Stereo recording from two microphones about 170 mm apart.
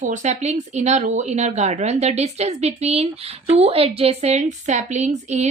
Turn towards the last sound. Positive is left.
turn(degrees=-40)  # may be behind; listen again after turning